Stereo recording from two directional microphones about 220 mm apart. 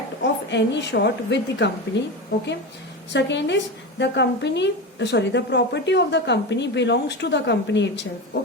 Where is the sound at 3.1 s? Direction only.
55° left (ahead or behind).